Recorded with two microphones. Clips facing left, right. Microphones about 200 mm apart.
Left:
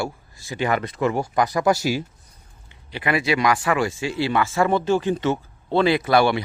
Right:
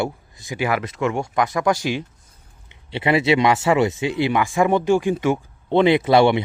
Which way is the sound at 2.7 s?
25° right (ahead or behind).